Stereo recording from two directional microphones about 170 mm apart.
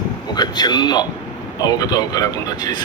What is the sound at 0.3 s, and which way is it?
Speech, 25° left (ahead or behind).